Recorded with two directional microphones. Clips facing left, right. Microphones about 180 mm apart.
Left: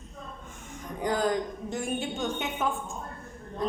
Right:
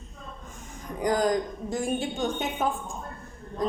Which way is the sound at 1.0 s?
40° right (ahead or behind).